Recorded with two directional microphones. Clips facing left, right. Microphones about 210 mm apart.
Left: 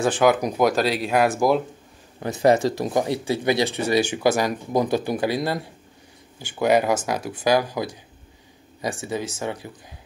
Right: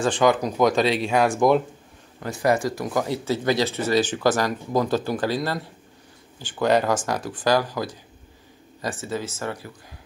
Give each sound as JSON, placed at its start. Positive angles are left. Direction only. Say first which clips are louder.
{"t": 0.0, "sound": "speech", "louder": "left 1 dB", "side_deg": 5}
{"t": 2.1, "sound": "speech", "louder": "left 4 dB", "side_deg": 25}